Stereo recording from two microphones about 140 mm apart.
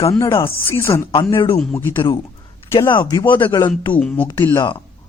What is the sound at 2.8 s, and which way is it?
Speech, 30° left (ahead or behind).